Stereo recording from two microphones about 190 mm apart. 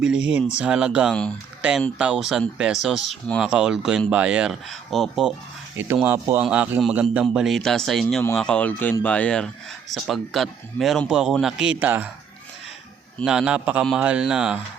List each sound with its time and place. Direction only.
0.0 s speech: 5° right (ahead or behind)
5.7 s speech: 10° right (ahead or behind)
8.0 s speech: 10° left (ahead or behind); by 12.1 s 10° right (ahead or behind)
13.2 s speech: 5° right (ahead or behind)